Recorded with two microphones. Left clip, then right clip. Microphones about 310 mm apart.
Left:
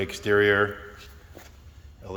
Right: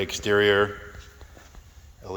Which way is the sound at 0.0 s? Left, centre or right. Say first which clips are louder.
Even; centre.